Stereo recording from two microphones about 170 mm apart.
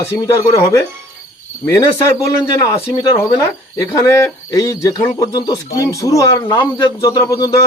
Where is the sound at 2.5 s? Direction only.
20° left (ahead or behind).